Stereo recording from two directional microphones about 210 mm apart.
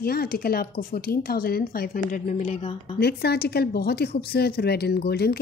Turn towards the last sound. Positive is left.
turn(degrees=50)  # may be behind; listen again after turning